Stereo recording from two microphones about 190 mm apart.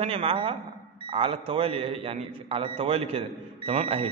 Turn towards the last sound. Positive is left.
turn(degrees=-30)  # may be behind; listen again after turning